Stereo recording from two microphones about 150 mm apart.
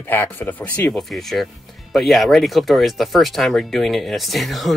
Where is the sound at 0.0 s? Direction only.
15° left (ahead or behind).